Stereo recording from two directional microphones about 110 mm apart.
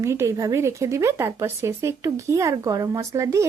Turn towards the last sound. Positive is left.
turn(degrees=-30)  # may be behind; listen again after turning